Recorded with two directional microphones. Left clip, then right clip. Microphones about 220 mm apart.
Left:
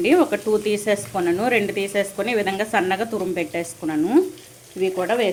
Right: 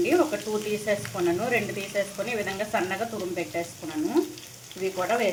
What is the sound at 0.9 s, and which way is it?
Speech, 50° left (ahead or behind).